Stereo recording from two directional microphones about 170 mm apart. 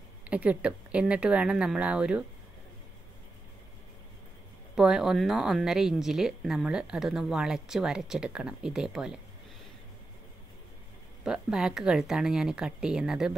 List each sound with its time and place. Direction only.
0.2 s speech: 10° right (ahead or behind)
4.7 s a woman's voice: 5° right (ahead or behind)
11.2 s a woman's voice: 5° right (ahead or behind)